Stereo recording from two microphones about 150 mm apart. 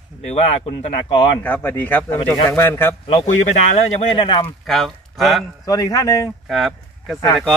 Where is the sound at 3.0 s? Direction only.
45° left (ahead or behind).